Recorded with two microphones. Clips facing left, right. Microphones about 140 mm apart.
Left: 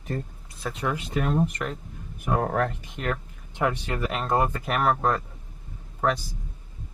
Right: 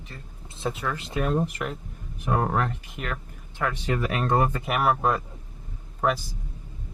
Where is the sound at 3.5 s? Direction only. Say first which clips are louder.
Left 3 dB; 20° left (ahead or behind).